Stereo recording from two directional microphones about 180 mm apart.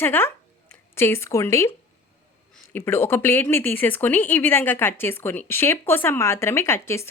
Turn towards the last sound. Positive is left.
turn(degrees=15)  # may be behind; listen again after turning